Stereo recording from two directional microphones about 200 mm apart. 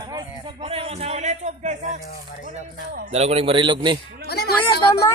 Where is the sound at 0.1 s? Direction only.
20° right (ahead or behind).